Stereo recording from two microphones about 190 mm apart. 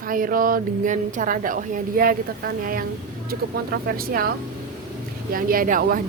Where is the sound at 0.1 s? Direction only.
45° right (ahead or behind).